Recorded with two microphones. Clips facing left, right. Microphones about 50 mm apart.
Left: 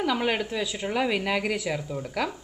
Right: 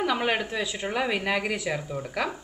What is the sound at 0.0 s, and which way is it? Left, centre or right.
A woman's voice, centre.